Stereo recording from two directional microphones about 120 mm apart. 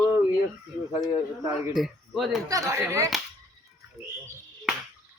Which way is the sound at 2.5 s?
25° right (ahead or behind).